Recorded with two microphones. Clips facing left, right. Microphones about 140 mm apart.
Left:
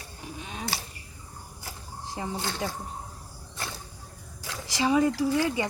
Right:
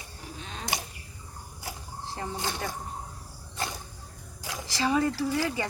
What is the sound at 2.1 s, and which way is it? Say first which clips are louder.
Snake: left 2 dB; 15° left (ahead or behind).